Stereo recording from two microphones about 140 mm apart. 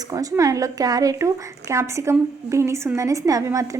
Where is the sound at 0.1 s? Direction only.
25° right (ahead or behind).